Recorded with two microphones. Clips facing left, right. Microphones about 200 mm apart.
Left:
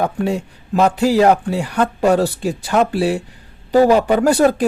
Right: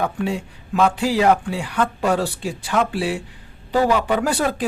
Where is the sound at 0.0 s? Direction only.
40° left (ahead or behind).